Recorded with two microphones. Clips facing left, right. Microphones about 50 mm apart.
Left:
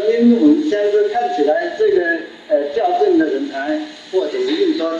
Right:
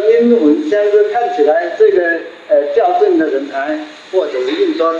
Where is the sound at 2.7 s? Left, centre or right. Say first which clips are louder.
Right 2 dB; right.